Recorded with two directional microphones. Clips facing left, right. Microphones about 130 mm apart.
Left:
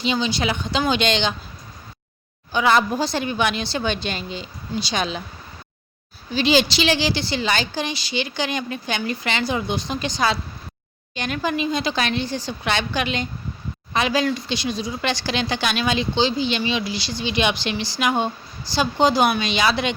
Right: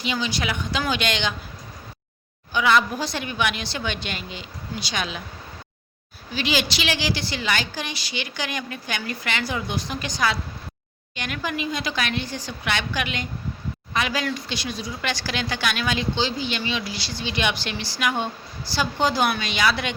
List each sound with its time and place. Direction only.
0.0 s speech: 25° left (ahead or behind)
2.5 s a woman's voice: 35° left (ahead or behind)
6.3 s speech: 30° left (ahead or behind)